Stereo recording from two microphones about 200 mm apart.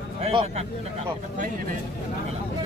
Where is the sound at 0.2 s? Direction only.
30° right (ahead or behind).